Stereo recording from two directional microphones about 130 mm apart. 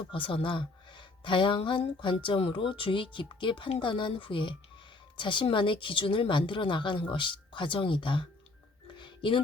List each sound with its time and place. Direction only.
0.1 s a woman's voice: 40° left (ahead or behind)
9.0 s music: 40° left (ahead or behind)